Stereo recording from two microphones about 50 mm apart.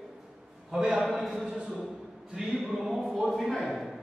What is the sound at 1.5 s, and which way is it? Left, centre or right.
Speech, right.